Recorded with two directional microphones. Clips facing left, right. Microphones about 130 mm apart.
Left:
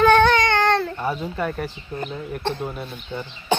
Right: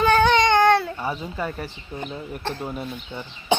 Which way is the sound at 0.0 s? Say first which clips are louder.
Left 3 dB; 5° right (ahead or behind).